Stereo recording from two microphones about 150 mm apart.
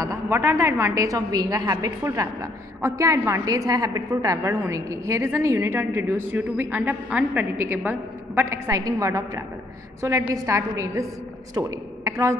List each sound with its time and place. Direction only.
0.0 s a woman's voice: 20° right (ahead or behind)